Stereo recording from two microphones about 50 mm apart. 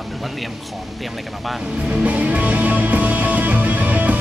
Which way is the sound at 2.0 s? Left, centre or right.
Right.